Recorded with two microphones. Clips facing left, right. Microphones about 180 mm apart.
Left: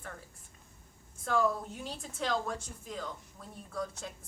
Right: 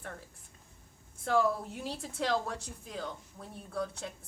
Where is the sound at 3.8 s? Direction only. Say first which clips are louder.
Right 2 dB; 60° right (ahead or behind).